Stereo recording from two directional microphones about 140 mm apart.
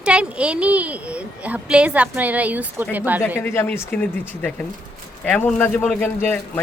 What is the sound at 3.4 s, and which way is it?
Speech, 15° left (ahead or behind).